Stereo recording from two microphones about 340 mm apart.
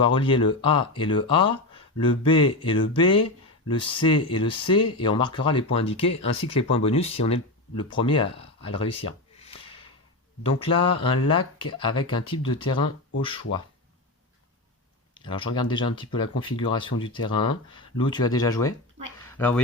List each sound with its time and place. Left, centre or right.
0.0 s speech: centre
10.9 s speech: centre
15.1 s speech: centre